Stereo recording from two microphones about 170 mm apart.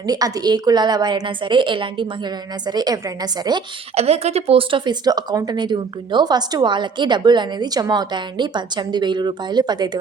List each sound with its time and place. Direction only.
0.0 s speech: 20° right (ahead or behind)
3.9 s speech: 40° right (ahead or behind)